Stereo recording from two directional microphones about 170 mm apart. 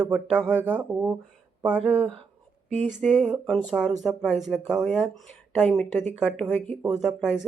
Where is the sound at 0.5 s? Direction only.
10° right (ahead or behind).